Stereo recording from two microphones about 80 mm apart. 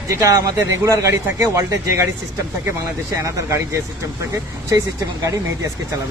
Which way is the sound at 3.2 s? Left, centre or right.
Right.